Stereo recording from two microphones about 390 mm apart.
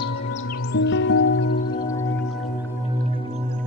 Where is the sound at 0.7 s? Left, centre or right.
Left.